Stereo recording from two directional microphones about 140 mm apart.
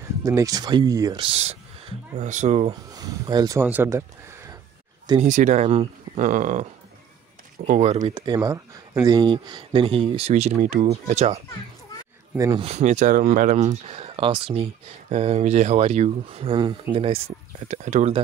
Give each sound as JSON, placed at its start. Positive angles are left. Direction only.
{"t": 0.2, "sound": "speech", "side_deg": -25}
{"t": 1.2, "sound": "speech", "side_deg": -45}
{"t": 2.9, "sound": "speech", "side_deg": -30}
{"t": 3.6, "sound": "speech", "side_deg": -15}
{"t": 5.2, "sound": "speech", "side_deg": -60}
{"t": 6.2, "sound": "speech", "side_deg": -70}
{"t": 8.0, "sound": "speech", "side_deg": -30}
{"t": 12.5, "sound": "speech", "side_deg": -50}
{"t": 13.8, "sound": "speech", "side_deg": -45}
{"t": 17.6, "sound": "speech", "side_deg": -65}